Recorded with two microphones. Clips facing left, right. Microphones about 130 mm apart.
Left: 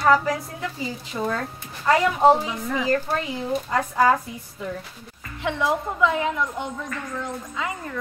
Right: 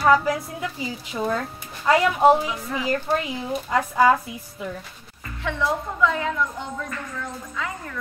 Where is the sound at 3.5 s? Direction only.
5° right (ahead or behind).